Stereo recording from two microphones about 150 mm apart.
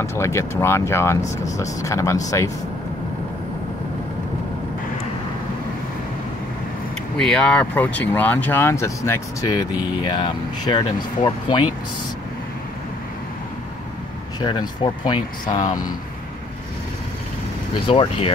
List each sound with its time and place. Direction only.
0.0 s speech: 20° left (ahead or behind)
7.2 s speech: 5° left (ahead or behind); by 11.6 s 30° left (ahead or behind)
14.4 s speech: 30° left (ahead or behind)
17.8 s speech: 40° left (ahead or behind)